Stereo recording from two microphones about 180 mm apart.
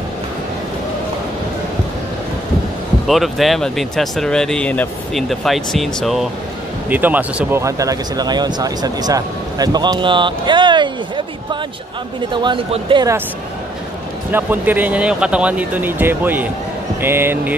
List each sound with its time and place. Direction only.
3.1 s speech: centre (ahead or behind); by 11.2 s 25° right (ahead or behind)
12.3 s speech: 25° right (ahead or behind)
14.3 s speech: 10° right (ahead or behind)